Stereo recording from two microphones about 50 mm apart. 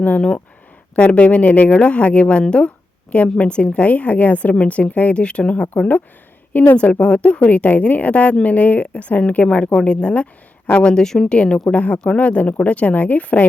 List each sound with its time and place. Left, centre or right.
0.9 s a woman's voice: left
7.0 s a woman's voice: left
11.3 s a woman's voice: left